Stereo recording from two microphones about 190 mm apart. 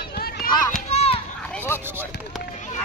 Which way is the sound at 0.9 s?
30° left (ahead or behind).